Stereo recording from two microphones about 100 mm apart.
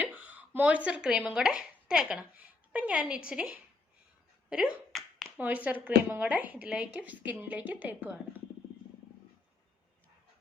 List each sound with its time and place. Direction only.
0.0 s speech: 15° right (ahead or behind)
4.9 s a sound: centre (ahead or behind)
5.4 s a woman's voice: 15° right (ahead or behind)